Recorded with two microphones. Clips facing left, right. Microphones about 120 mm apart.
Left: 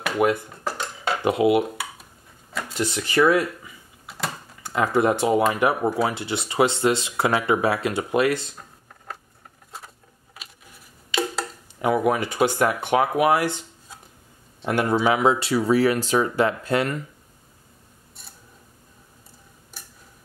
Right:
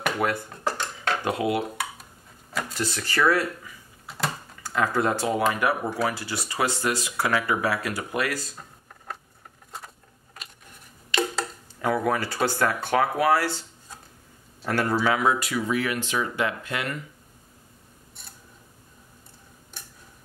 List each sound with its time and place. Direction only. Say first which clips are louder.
0.2 s speech: left 7 dB; 20° left (ahead or behind)
0.7 s dishes: even; 5° left (ahead or behind)
1.2 s speech: left 8 dB; 20° left (ahead or behind)
2.7 s speech: left 8 dB; 20° left (ahead or behind)
10.3 s a sound: even; 5° left (ahead or behind)
11.8 s speech: left 3 dB; 20° left (ahead or behind)
14.7 s speech: left 3 dB; 20° left (ahead or behind); by 16.9 s 35° left (ahead or behind)